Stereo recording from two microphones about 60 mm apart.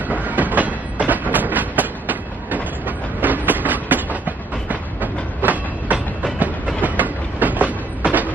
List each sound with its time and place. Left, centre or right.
0.1 s train: right